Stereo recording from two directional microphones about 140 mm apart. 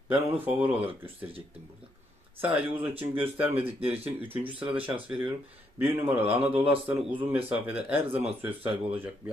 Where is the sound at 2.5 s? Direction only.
15° right (ahead or behind).